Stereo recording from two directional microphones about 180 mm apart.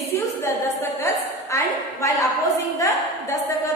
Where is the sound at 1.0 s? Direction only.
15° left (ahead or behind).